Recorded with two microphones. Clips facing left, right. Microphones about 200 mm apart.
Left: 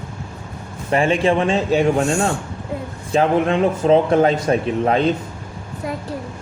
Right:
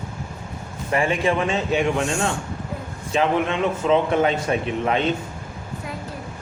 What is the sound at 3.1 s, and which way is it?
A man's voice, 40° left (ahead or behind).